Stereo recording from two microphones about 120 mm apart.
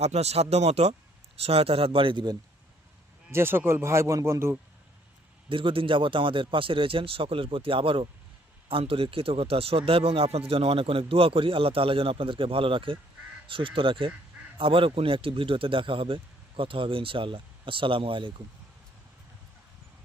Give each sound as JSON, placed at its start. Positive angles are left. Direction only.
{"t": 0.0, "sound": "speech", "side_deg": -65}
{"t": 3.2, "sound": "speech", "side_deg": -20}
{"t": 5.5, "sound": "speech", "side_deg": -45}